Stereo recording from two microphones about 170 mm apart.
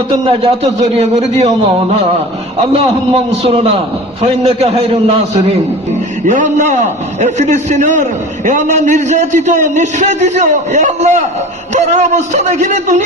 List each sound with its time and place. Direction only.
0.1 s a man's voice: 35° right (ahead or behind)
6.2 s a man's voice: 45° right (ahead or behind)